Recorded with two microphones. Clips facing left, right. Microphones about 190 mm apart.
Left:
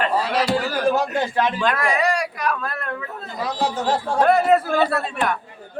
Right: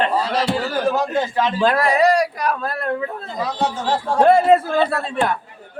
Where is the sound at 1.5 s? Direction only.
35° right (ahead or behind).